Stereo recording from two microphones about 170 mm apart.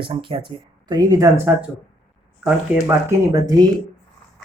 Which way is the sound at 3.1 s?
20° right (ahead or behind).